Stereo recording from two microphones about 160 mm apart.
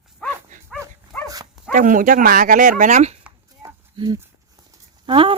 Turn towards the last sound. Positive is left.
turn(degrees=-35)  # may be behind; listen again after turning